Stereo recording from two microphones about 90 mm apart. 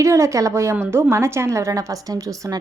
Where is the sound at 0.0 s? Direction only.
35° right (ahead or behind).